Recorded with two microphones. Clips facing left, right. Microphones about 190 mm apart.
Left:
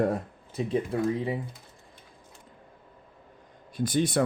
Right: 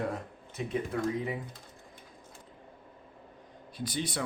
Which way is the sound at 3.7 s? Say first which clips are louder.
Left 9 dB; 50° left (ahead or behind).